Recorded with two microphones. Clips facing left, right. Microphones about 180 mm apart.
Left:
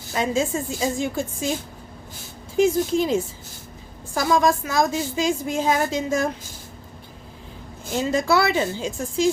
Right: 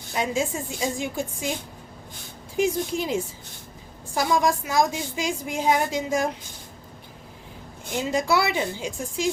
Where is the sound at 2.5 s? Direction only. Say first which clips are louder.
Left 5 dB; 15° right (ahead or behind).